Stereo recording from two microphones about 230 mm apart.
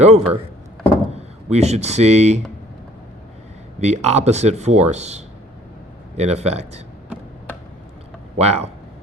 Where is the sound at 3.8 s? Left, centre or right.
Right.